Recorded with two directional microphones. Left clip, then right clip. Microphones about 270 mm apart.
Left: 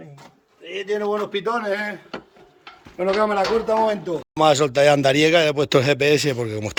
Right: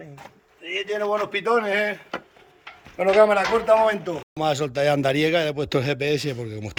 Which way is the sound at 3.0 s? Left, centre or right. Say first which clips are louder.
Right 3 dB; right.